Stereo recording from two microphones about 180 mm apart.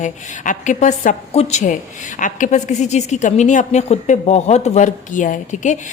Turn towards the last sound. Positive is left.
turn(degrees=40)  # may be behind; listen again after turning